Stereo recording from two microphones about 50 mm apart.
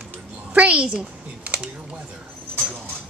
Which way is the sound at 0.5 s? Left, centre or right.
Right.